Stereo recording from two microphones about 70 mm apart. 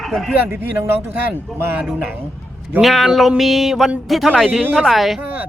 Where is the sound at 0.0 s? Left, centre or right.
Centre.